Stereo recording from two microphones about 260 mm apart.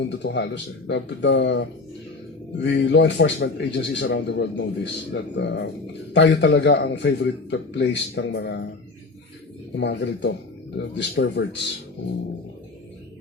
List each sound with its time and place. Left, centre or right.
0.0 s a man's voice: left
9.7 s a man's voice: left